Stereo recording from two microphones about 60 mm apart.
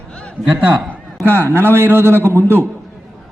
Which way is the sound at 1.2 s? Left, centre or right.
Right.